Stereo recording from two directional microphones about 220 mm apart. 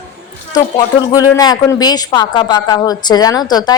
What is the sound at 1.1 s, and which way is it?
A woman's voice, 15° left (ahead or behind).